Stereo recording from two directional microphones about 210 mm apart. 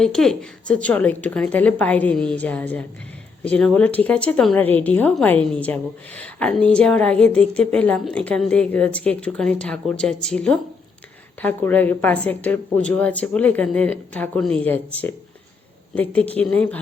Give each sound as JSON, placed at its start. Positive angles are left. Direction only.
{"t": 0.0, "sound": "a woman's voice", "side_deg": 0}
{"t": 16.0, "sound": "a woman's voice", "side_deg": 5}